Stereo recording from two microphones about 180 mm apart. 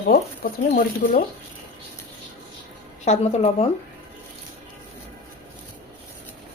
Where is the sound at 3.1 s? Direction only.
35° left (ahead or behind).